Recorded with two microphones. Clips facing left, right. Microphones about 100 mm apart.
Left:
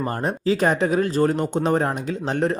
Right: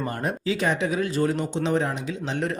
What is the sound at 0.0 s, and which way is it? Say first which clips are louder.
Speech: left 4 dB; 35° left (ahead or behind).